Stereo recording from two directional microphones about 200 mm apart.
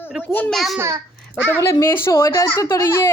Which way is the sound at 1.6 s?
15° left (ahead or behind).